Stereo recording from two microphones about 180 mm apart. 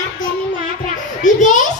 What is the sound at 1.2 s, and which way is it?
Children playing, 45° left (ahead or behind).